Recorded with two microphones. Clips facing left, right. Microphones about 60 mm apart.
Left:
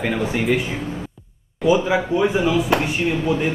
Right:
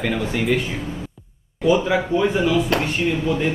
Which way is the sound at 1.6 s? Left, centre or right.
Centre.